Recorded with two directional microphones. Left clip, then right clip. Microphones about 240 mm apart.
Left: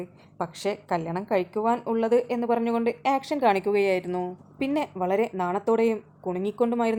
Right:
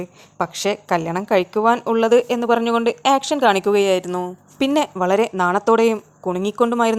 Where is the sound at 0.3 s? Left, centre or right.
Centre.